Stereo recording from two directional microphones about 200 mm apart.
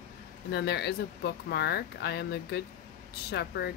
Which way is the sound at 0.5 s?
55° left (ahead or behind).